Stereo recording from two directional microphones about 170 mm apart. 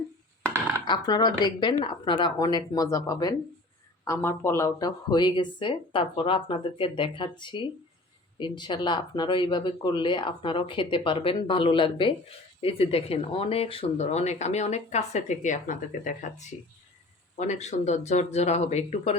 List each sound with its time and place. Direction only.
0.9 s speech: 25° left (ahead or behind); by 19.1 s 40° left (ahead or behind)